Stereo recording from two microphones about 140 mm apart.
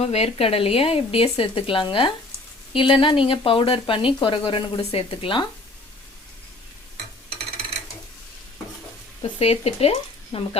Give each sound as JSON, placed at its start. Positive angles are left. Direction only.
{"t": 0.0, "sound": "speech", "side_deg": 50}
{"t": 9.4, "sound": "speech", "side_deg": 45}